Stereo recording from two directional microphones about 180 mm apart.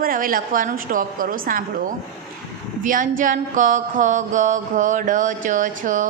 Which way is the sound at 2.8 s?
50° right (ahead or behind).